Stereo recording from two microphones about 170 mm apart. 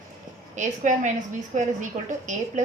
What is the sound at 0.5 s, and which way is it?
A woman's voice, 45° right (ahead or behind).